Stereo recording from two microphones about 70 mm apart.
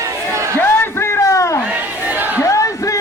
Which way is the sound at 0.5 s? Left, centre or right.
Left.